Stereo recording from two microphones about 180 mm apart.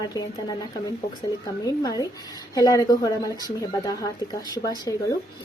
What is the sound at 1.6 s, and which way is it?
A woman's voice, 20° left (ahead or behind).